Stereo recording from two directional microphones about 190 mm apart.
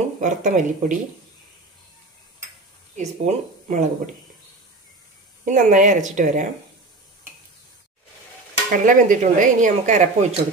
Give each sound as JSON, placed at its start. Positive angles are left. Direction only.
{"t": 0.2, "sound": "speech", "side_deg": -40}
{"t": 3.0, "sound": "speech", "side_deg": -35}
{"t": 5.4, "sound": "speech", "side_deg": -45}
{"t": 8.7, "sound": "speech", "side_deg": -45}